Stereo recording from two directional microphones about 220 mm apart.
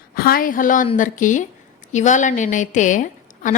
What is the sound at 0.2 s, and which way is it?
A woman's voice, 40° left (ahead or behind).